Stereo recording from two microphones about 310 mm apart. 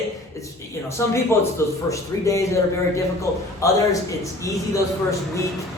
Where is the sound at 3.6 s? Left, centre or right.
Centre.